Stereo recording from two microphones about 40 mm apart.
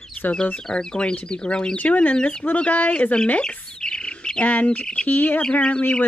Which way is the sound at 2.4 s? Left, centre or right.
Left.